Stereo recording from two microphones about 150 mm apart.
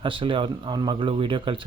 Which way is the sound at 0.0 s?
35° right (ahead or behind).